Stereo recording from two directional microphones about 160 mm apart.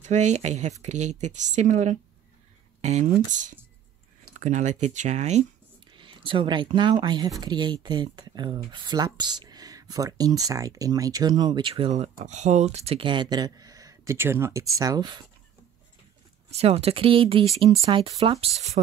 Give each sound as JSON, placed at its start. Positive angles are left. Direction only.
{"t": 0.0, "sound": "speech", "side_deg": -45}
{"t": 5.9, "sound": "speech", "side_deg": -30}
{"t": 16.4, "sound": "speech", "side_deg": -40}